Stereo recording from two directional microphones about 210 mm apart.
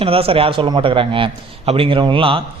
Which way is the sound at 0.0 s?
25° right (ahead or behind).